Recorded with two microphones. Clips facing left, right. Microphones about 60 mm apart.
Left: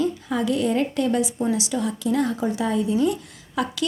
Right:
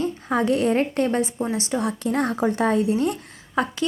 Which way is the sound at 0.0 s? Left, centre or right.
Right.